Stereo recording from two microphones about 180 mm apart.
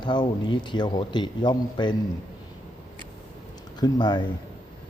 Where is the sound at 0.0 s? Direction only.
25° left (ahead or behind).